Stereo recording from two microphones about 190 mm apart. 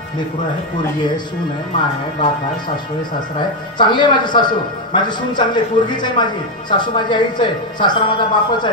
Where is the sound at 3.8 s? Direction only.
25° left (ahead or behind).